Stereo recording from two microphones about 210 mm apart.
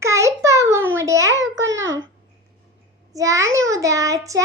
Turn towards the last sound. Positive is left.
turn(degrees=-15)  # may be behind; listen again after turning